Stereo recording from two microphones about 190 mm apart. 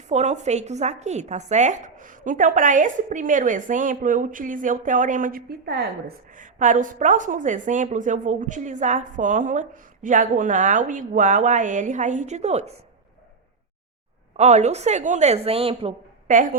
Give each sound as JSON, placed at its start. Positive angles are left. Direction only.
{"t": 0.1, "sound": "a woman's voice", "side_deg": -35}
{"t": 6.3, "sound": "a woman's voice", "side_deg": -45}
{"t": 14.3, "sound": "a woman's voice", "side_deg": -35}